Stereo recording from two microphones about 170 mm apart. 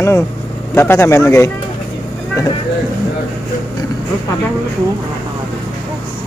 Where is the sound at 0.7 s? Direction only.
15° left (ahead or behind).